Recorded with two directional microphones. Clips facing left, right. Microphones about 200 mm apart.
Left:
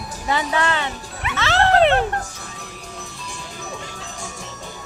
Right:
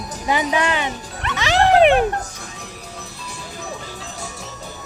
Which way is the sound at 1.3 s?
15° right (ahead or behind).